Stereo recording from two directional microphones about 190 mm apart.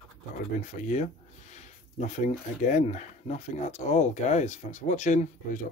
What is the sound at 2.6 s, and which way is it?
Speech, 40° left (ahead or behind).